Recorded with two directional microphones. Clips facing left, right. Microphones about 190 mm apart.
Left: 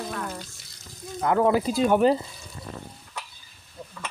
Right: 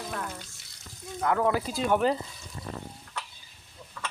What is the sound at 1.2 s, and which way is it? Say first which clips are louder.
Speech: left 4 dB; 25° left (ahead or behind).